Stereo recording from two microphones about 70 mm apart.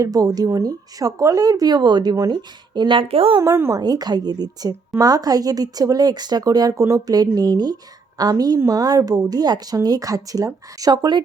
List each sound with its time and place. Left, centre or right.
0.0 s speech: right
2.1 s speech: right
3.7 s speech: right